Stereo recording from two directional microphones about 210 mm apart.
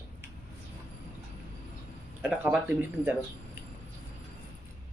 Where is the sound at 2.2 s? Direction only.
5° right (ahead or behind).